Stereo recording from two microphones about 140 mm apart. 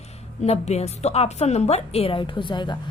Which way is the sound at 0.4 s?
50° left (ahead or behind).